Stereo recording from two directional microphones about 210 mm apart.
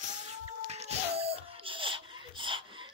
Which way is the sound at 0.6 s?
30° right (ahead or behind).